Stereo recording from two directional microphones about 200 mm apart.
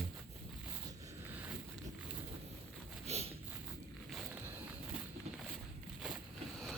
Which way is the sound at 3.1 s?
30° right (ahead or behind).